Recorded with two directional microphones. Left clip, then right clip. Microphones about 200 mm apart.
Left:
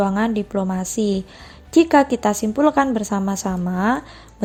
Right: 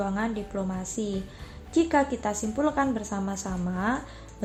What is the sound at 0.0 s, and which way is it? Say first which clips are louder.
Speech: left 9 dB; 45° left (ahead or behind).